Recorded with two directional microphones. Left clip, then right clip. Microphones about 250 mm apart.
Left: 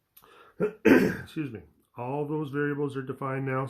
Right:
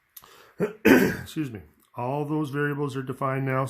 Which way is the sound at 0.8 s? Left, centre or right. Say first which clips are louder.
Right 2 dB; right.